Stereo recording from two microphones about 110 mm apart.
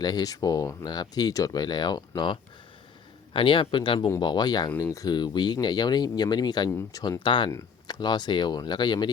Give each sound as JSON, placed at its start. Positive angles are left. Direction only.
{"t": 0.0, "sound": "speech", "side_deg": 35}
{"t": 3.3, "sound": "speech", "side_deg": 50}
{"t": 6.7, "sound": "speech", "side_deg": 25}
{"t": 7.2, "sound": "speech", "side_deg": 50}